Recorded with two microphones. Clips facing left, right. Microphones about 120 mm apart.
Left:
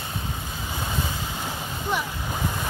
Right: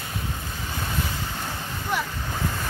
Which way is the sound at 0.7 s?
20° left (ahead or behind).